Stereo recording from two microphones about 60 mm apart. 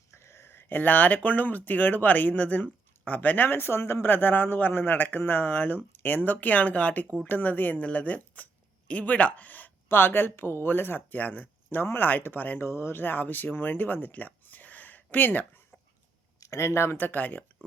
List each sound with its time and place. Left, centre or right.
0.1 s speech: left
12.6 s speech: left
16.4 s speech: left
17.0 s speech: left